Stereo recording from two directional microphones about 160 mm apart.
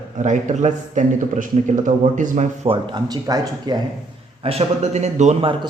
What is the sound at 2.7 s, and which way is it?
Speech, 30° right (ahead or behind).